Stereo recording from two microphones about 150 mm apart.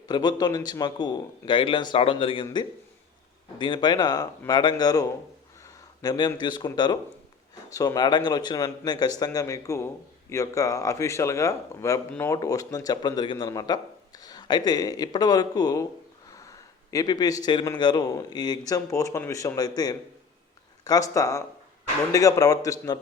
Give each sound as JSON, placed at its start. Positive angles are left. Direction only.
{"t": 0.1, "sound": "a man's voice", "side_deg": 30}